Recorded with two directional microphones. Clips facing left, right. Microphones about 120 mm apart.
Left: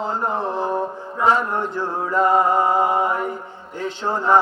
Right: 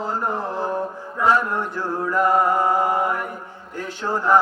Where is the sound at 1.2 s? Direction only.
20° left (ahead or behind).